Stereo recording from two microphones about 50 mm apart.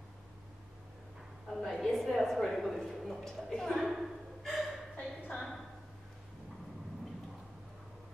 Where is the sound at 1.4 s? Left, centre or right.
Centre.